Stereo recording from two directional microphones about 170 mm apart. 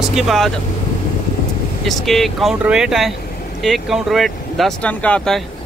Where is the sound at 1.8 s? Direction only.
Centre (ahead or behind).